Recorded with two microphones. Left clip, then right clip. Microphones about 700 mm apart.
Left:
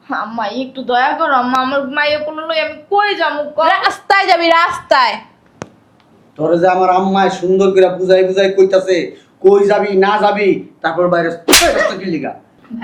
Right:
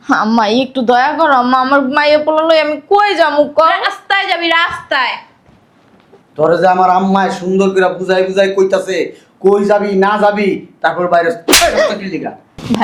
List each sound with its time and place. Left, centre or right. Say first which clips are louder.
0.1 s a woman's voice: right 8 dB; right
3.7 s a woman's voice: left 1 dB; left
6.3 s a man's voice: right 2 dB; right
11.4 s speech: left 4 dB; centre